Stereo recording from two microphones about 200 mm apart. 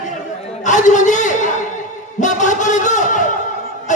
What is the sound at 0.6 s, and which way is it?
A man's voice, 40° left (ahead or behind).